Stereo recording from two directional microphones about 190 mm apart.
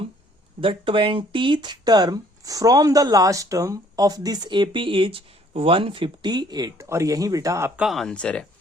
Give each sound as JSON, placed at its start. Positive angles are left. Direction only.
{"t": 0.6, "sound": "speech", "side_deg": -30}
{"t": 7.9, "sound": "speech", "side_deg": 0}